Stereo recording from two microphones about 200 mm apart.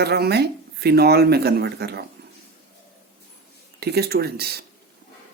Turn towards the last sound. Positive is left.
turn(degrees=-50)  # may be behind; listen again after turning